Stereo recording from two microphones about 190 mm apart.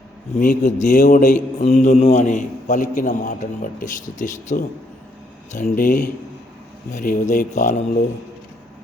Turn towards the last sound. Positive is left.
turn(degrees=40)  # may be behind; listen again after turning